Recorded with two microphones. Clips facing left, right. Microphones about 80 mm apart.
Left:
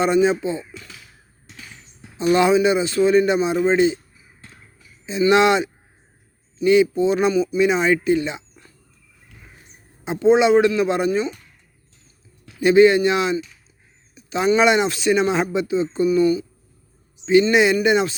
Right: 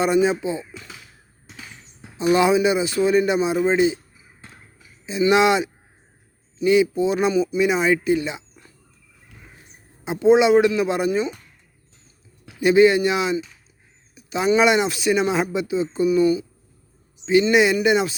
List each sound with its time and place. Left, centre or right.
0.0 s speech: centre
2.0 s a man's voice: centre
10.0 s speech: centre
12.5 s speech: centre
17.5 s speech: centre